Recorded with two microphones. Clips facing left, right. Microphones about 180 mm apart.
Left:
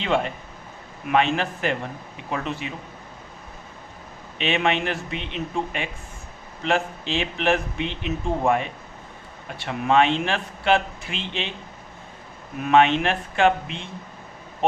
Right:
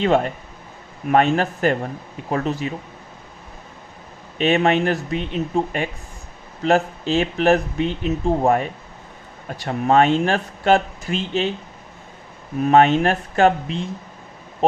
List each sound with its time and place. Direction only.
0.0 s speech: 45° right (ahead or behind)
4.4 s speech: 45° right (ahead or behind)
12.5 s speech: 40° right (ahead or behind)